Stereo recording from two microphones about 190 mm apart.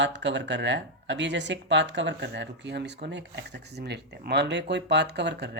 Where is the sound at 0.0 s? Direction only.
70° right (ahead or behind).